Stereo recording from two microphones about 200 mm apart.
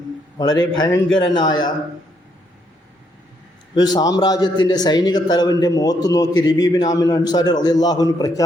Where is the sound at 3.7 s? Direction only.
20° left (ahead or behind).